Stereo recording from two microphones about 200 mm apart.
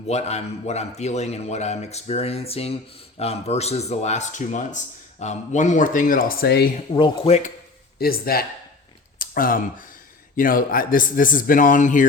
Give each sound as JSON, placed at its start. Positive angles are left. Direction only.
{"t": 0.1, "sound": "a man's voice", "side_deg": 30}
{"t": 6.9, "sound": "speech", "side_deg": 25}
{"t": 7.9, "sound": "speech", "side_deg": 50}